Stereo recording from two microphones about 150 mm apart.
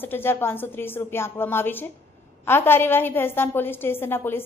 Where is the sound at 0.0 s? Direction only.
15° left (ahead or behind).